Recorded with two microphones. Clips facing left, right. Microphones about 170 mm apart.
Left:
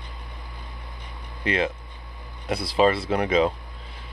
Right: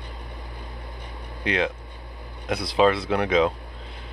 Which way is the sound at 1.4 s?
Centre (ahead or behind).